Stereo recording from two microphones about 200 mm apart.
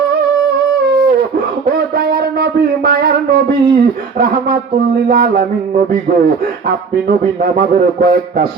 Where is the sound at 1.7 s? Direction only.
50° right (ahead or behind).